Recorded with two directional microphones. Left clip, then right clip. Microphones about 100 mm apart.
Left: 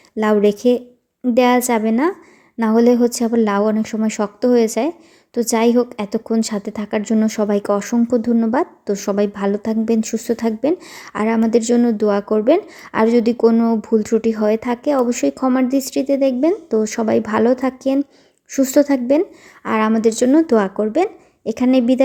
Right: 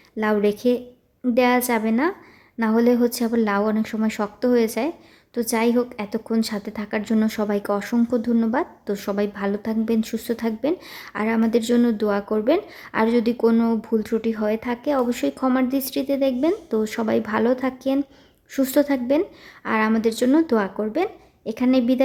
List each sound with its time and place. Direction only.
0.2 s a woman's voice: 45° left (ahead or behind)